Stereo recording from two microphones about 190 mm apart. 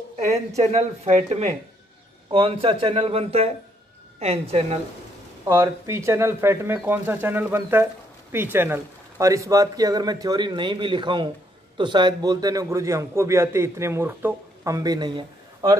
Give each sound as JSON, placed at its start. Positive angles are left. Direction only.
{"t": 0.6, "sound": "a man's voice", "side_deg": -35}
{"t": 5.5, "sound": "speech", "side_deg": -15}